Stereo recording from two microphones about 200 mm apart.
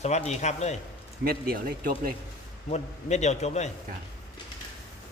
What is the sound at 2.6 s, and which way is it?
A man's voice, 35° left (ahead or behind).